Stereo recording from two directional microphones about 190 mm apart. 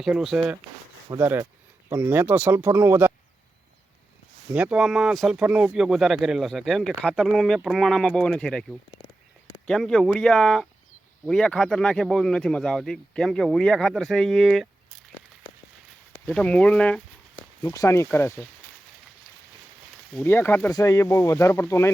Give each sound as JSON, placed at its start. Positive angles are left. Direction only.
{"t": 0.0, "sound": "speech", "side_deg": 0}
{"t": 4.5, "sound": "speech", "side_deg": -5}
{"t": 16.2, "sound": "speech", "side_deg": 5}
{"t": 17.6, "sound": "speech", "side_deg": 15}
{"t": 20.1, "sound": "speech", "side_deg": 10}